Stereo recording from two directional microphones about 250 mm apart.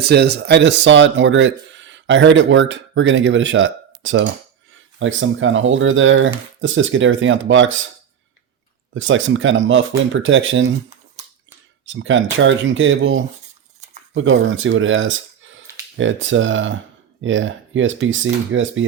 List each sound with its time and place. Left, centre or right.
0.0 s speech: right
9.0 s speech: right
11.9 s speech: right